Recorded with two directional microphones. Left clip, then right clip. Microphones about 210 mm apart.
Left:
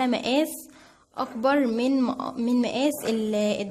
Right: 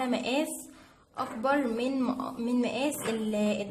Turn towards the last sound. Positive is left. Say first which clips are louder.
# left 5 dB
turn(degrees=45)  # may be behind; listen again after turning